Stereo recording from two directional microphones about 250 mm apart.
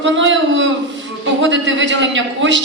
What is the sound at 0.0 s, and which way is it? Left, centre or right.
A man's voice, right.